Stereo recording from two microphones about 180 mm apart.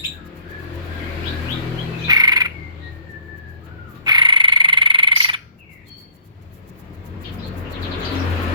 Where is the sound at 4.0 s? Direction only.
25° right (ahead or behind).